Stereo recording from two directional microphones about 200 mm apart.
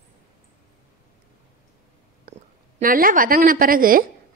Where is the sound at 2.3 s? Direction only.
45° right (ahead or behind).